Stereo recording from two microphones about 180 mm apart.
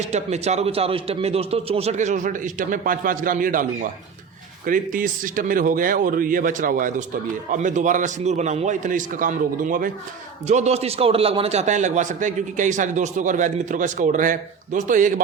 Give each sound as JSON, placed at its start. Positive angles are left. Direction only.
{"t": 0.0, "sound": "a man's voice", "side_deg": -40}
{"t": 10.4, "sound": "a man's voice", "side_deg": -40}